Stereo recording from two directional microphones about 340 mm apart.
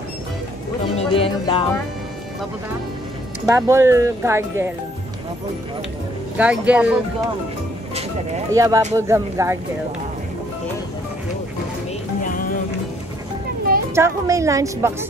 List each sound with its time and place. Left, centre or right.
0.9 s music: centre
3.4 s speech: centre
6.3 s speech: centre
8.5 s speech: centre
12.2 s music: left
13.9 s speech: centre